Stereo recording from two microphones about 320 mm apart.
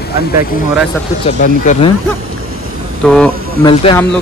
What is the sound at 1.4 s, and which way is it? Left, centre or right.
Speech, left.